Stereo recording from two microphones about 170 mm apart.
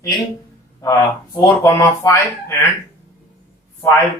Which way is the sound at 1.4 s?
20° left (ahead or behind).